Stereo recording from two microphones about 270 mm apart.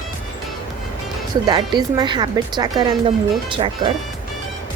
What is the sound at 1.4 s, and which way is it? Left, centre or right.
Speech, centre.